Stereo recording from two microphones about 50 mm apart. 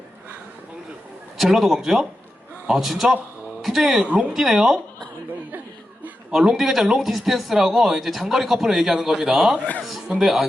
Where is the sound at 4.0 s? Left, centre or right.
Right.